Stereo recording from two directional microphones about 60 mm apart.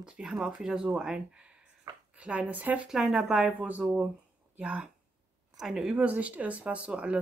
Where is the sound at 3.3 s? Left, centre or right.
Right.